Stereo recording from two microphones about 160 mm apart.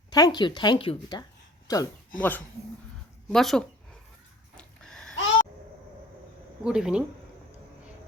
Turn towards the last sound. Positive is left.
turn(degrees=-5)  # may be behind; listen again after turning